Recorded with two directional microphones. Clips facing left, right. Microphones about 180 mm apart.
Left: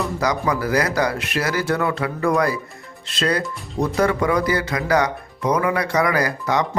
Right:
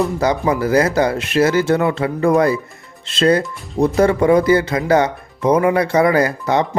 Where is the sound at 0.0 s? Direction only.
25° right (ahead or behind).